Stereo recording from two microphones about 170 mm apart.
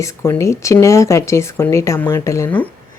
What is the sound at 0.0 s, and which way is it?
Speech, 15° left (ahead or behind).